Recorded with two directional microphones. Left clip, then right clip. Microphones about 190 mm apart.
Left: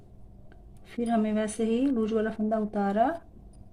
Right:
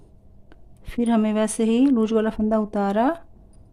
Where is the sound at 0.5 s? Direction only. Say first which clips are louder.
Right 7 dB; 35° right (ahead or behind).